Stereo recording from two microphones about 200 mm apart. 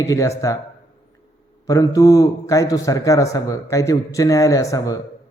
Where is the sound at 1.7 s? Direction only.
15° left (ahead or behind).